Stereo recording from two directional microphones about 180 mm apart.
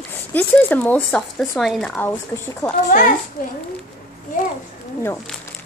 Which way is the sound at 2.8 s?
45° left (ahead or behind).